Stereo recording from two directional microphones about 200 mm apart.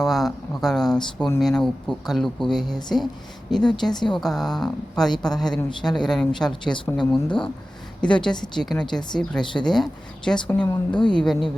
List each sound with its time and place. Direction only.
0.0 s speech: centre (ahead or behind)
3.9 s a woman's voice: 20° left (ahead or behind)
4.2 s speech: centre (ahead or behind)